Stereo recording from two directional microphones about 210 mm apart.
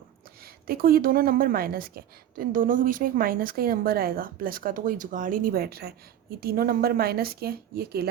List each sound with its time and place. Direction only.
0.7 s a woman's voice: 45° right (ahead or behind)